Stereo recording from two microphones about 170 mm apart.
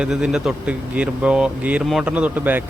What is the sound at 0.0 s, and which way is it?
Speech, 5° right (ahead or behind).